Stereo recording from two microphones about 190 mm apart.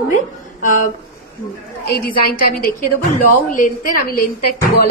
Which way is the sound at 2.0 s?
50° left (ahead or behind).